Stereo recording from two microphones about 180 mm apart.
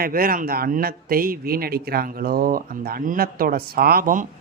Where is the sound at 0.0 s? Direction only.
55° right (ahead or behind).